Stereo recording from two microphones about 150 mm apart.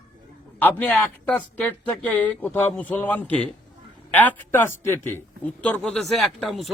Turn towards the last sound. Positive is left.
turn(degrees=0)  # may be behind; listen again after turning